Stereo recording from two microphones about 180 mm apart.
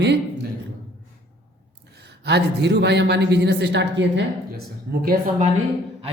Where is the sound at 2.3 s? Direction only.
70° right (ahead or behind).